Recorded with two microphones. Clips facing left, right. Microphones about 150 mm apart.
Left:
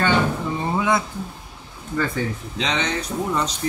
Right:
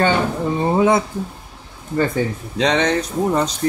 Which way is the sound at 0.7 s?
30° right (ahead or behind).